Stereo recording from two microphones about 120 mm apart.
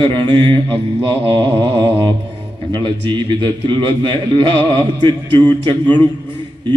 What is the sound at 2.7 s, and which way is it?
A man's voice, 40° right (ahead or behind).